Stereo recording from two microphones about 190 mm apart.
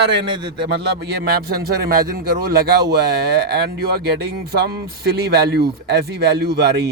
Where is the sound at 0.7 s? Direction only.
60° right (ahead or behind).